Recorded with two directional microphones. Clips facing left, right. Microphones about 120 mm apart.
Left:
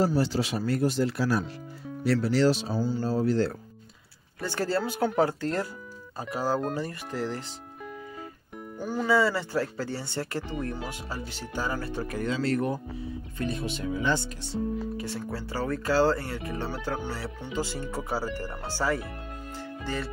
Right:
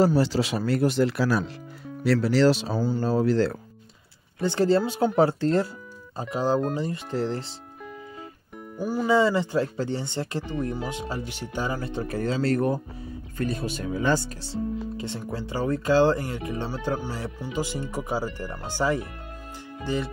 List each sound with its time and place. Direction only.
0.0 s speech: 90° right
4.4 s speech: 20° right (ahead or behind)
7.2 s speech: 30° right (ahead or behind)
8.5 s speech: 10° right (ahead or behind)
9.1 s speech: 20° right (ahead or behind)